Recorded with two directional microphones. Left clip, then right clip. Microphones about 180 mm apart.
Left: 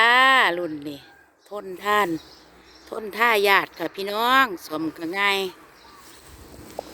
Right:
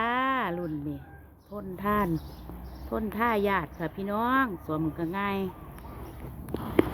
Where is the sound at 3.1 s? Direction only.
60° left (ahead or behind); by 5.4 s 40° left (ahead or behind).